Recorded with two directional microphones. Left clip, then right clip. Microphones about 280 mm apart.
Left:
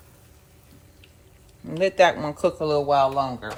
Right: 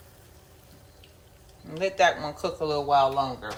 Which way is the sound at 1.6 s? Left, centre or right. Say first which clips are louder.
Left 4 dB; left.